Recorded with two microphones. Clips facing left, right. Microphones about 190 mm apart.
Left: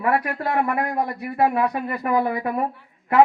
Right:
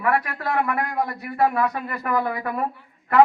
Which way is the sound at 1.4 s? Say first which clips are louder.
Left 1 dB; 15° left (ahead or behind).